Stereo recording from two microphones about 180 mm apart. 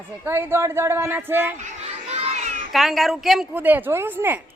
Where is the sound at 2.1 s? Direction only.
35° right (ahead or behind).